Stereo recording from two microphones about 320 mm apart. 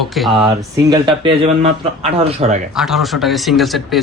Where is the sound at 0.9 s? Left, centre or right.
Centre.